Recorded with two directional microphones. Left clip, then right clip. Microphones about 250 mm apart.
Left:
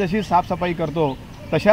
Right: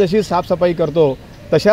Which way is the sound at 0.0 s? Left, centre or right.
Right.